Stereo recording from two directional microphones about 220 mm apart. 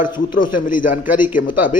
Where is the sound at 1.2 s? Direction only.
10° right (ahead or behind).